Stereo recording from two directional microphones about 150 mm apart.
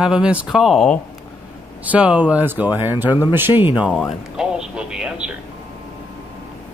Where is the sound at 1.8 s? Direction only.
10° right (ahead or behind).